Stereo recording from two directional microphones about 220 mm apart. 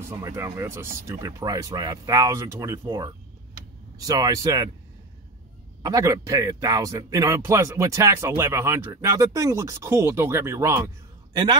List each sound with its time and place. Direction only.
0.1 s speech: 15° right (ahead or behind)
5.8 s speech: 15° right (ahead or behind)